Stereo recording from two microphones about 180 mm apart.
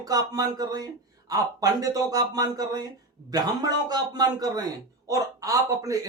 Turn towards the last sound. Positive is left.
turn(degrees=-20)  # may be behind; listen again after turning